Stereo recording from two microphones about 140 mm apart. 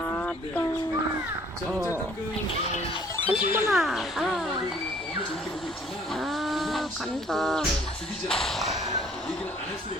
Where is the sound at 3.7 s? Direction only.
Centre (ahead or behind).